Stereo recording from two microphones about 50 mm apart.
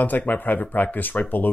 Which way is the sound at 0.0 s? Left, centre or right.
Left.